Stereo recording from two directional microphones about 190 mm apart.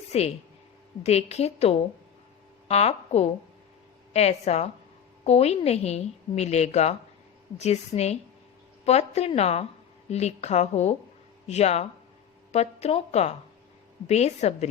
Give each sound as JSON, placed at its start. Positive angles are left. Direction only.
{"t": 0.1, "sound": "a woman's voice", "side_deg": 35}